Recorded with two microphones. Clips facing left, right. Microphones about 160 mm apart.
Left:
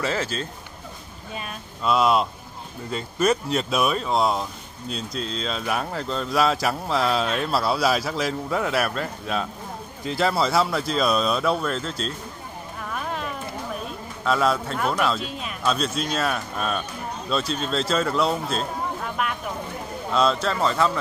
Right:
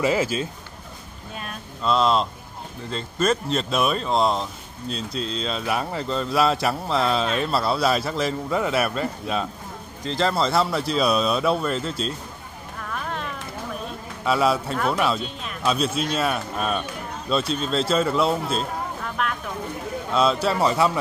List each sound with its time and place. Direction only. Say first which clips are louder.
0.0 s speech: right 4 dB; 10° right (ahead or behind)
1.3 s speech: left 1 dB; 5° left (ahead or behind)
14.2 s speech: right 1 dB; 5° right (ahead or behind)
19.2 s a sound: right 1 dB; 5° left (ahead or behind)
20.1 s speech: right 1 dB; centre (ahead or behind)